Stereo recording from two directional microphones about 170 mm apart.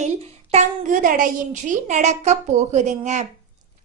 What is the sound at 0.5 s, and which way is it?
A woman's voice, 50° right (ahead or behind).